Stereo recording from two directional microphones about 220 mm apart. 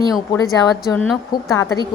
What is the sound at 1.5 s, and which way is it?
Speech, 15° left (ahead or behind).